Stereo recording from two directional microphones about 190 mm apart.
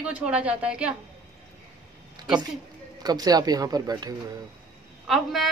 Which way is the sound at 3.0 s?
20° right (ahead or behind).